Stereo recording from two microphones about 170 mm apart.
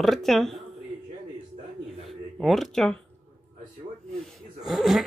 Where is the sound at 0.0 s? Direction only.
Centre (ahead or behind).